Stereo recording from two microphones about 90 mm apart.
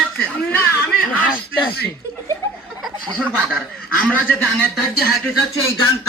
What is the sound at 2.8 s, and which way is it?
Chuckle, 5° right (ahead or behind).